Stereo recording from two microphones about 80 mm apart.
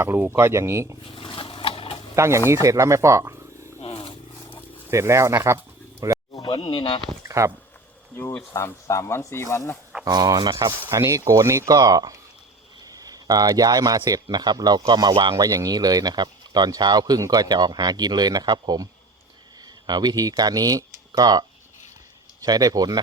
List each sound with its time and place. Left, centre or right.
0.0 s speech: right
1.0 s a sound: left
2.1 s speech: right
3.9 s wild animals: left
4.9 s speech: right
6.0 s speech: right
6.4 s speech: left
7.3 s a sound: right
8.1 s speech: left
10.0 s speech: right
10.9 s speech: right
15.4 s speech: right